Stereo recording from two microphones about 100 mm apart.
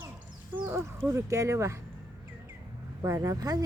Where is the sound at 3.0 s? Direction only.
35° right (ahead or behind).